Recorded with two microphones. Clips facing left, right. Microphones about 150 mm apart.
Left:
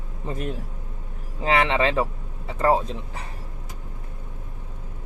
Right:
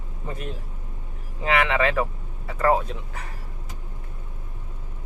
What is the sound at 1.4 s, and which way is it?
Speech, 30° left (ahead or behind).